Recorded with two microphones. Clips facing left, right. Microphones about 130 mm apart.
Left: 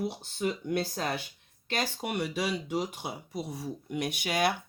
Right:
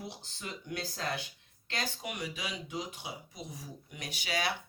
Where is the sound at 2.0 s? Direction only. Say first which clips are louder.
Left 8 dB; 65° left (ahead or behind).